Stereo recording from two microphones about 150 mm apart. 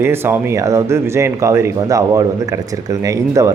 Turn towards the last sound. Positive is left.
turn(degrees=-20)  # may be behind; listen again after turning